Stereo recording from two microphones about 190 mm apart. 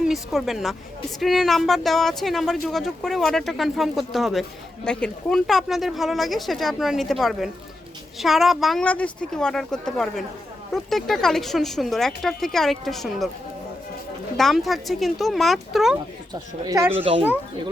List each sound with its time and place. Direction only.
0.0 s speech: centre (ahead or behind)
14.3 s speech: centre (ahead or behind)
16.3 s speech: 20° right (ahead or behind)
17.0 s a child's voice: 30° right (ahead or behind)